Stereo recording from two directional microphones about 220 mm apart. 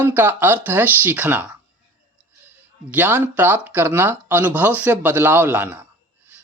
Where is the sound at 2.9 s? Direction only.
10° right (ahead or behind).